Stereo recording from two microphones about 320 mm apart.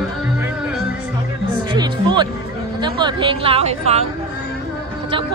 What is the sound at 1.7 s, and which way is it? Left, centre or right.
Speech, centre.